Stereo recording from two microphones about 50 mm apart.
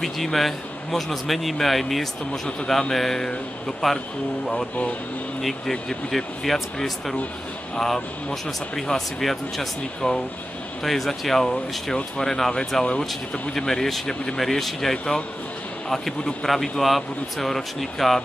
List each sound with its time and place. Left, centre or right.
0.0 s a man's voice: centre
2.4 s speech: centre
5.4 s a man's voice: centre
10.0 s speech: left
10.8 s a man's voice: centre